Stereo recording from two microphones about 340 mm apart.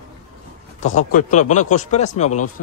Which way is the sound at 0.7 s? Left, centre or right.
Left.